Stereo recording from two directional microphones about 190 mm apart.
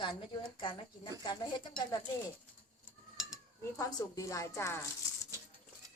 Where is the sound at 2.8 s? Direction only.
Centre (ahead or behind).